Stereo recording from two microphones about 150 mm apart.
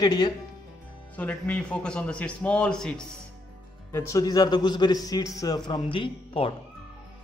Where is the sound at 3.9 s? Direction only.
20° left (ahead or behind); by 6.5 s 35° left (ahead or behind).